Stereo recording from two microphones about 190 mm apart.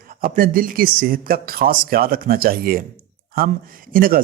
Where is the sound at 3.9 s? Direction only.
50° right (ahead or behind).